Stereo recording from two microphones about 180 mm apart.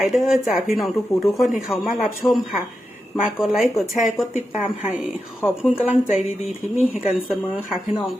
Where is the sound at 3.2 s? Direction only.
5° right (ahead or behind).